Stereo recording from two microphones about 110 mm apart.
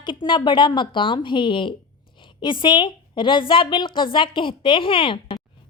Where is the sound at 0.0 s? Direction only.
50° left (ahead or behind).